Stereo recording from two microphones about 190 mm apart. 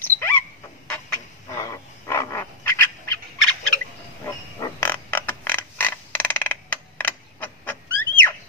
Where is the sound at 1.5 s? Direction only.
15° left (ahead or behind).